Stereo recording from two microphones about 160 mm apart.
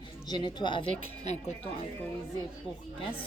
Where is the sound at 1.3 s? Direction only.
45° left (ahead or behind).